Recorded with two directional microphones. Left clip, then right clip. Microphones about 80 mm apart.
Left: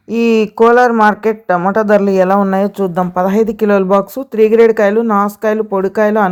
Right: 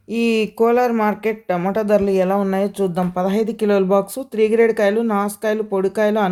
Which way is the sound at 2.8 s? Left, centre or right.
Left.